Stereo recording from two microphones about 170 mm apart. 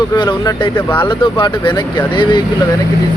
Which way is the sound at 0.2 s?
25° left (ahead or behind).